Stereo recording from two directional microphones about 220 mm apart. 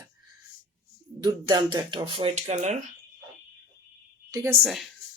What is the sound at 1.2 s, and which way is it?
Speech, 20° right (ahead or behind).